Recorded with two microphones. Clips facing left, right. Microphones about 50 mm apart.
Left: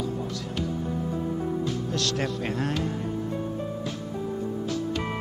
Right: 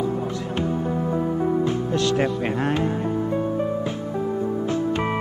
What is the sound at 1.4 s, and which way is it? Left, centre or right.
Music, right.